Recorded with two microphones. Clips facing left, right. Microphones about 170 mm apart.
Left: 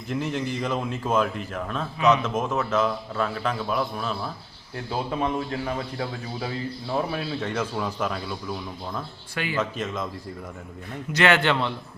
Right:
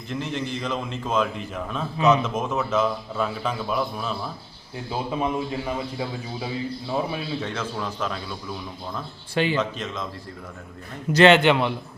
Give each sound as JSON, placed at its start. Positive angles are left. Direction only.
{"t": 0.1, "sound": "a man's voice", "side_deg": 5}
{"t": 7.5, "sound": "a man's voice", "side_deg": 10}
{"t": 9.3, "sound": "speech", "side_deg": -30}
{"t": 9.6, "sound": "a man's voice", "side_deg": 5}
{"t": 11.1, "sound": "a man's voice", "side_deg": -30}
{"t": 11.3, "sound": "a man's voice", "side_deg": -15}